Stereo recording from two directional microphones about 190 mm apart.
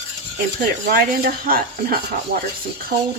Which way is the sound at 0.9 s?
50° right (ahead or behind).